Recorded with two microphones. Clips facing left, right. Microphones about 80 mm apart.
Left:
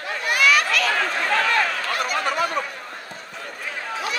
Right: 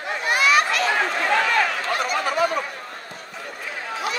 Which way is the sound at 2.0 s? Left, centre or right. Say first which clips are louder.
Right 1 dB; centre.